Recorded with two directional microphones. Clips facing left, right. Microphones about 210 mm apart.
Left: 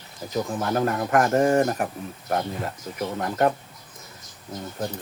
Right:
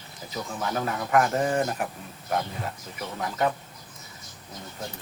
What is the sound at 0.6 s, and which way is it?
Speech, 50° left (ahead or behind).